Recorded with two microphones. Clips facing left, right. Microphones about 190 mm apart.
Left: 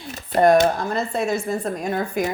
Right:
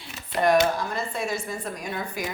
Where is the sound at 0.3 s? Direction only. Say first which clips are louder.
Left 5 dB; 45° left (ahead or behind).